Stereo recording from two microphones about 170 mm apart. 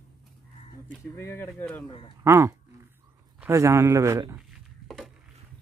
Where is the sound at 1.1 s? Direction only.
15° left (ahead or behind).